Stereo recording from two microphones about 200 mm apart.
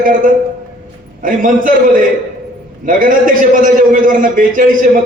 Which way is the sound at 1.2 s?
40° right (ahead or behind).